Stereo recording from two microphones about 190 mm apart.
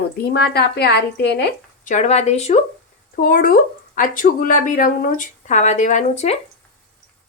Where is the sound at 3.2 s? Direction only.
50° left (ahead or behind).